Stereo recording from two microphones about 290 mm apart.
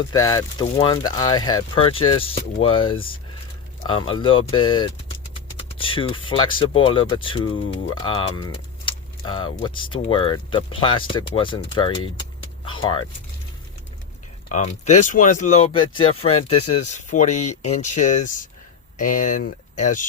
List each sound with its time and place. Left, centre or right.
0.0 s speech: centre
14.5 s speech: left
16.3 s speech: left
16.7 s speech: left